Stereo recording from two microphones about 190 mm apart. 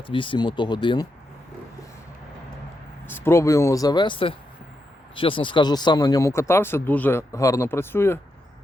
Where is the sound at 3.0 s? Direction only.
10° left (ahead or behind).